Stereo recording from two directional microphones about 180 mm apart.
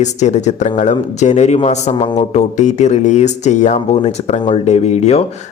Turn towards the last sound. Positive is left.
turn(degrees=35)  # may be behind; listen again after turning